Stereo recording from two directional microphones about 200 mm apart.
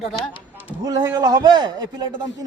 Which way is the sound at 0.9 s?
20° right (ahead or behind).